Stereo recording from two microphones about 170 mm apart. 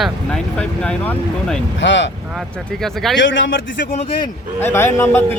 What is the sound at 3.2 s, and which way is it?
Speech, 90° left.